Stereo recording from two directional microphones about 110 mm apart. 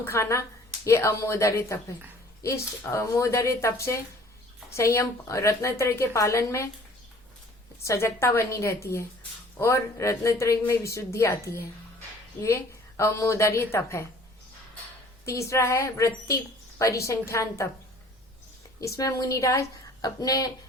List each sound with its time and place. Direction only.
0.0 s a woman's voice: 25° left (ahead or behind)
7.8 s a woman's voice: 25° left (ahead or behind)
13.0 s a woman's voice: 25° left (ahead or behind)
15.2 s a woman's voice: 25° left (ahead or behind)
18.8 s a woman's voice: 30° left (ahead or behind)